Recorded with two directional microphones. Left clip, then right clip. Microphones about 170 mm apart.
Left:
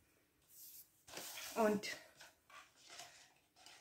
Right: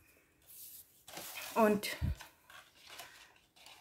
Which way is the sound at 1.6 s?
45° right (ahead or behind).